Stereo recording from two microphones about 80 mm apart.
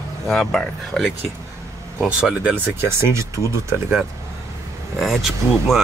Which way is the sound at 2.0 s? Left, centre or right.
Centre.